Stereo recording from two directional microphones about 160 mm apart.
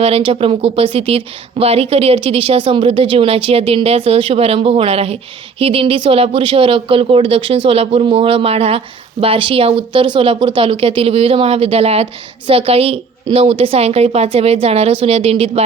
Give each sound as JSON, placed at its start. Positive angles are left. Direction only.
{"t": 0.0, "sound": "speech", "side_deg": -35}